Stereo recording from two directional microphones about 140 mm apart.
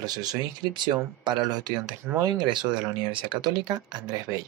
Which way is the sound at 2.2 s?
30° right (ahead or behind).